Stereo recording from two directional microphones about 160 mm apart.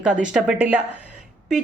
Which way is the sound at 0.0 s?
5° right (ahead or behind).